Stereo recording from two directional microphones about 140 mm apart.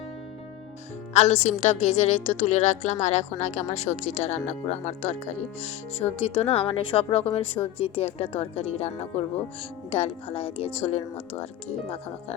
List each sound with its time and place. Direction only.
1.1 s a woman's voice: 50° left (ahead or behind)